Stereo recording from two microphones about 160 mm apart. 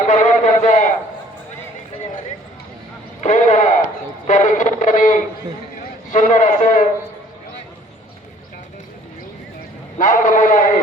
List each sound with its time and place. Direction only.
0.1 s speech: 50° left (ahead or behind)
3.2 s radio: 50° left (ahead or behind)
4.3 s speech: 50° left (ahead or behind)
10.0 s a man's voice: 55° left (ahead or behind)